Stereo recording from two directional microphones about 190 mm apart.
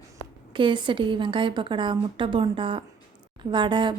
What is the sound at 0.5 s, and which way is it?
Speech, 25° right (ahead or behind).